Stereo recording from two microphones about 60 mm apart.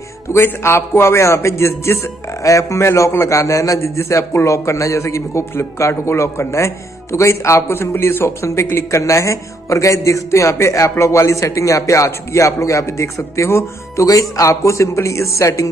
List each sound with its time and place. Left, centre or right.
0.3 s a man's voice: left
3.8 s a man's voice: left